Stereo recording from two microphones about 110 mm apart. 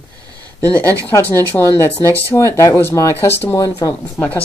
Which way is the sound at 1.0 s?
15° left (ahead or behind).